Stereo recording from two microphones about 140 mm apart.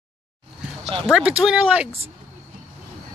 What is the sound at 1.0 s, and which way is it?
Speech, 5° right (ahead or behind).